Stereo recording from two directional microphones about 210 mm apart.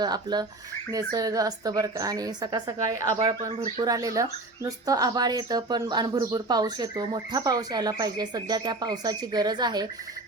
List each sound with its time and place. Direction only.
0.0 s speech: 20° right (ahead or behind)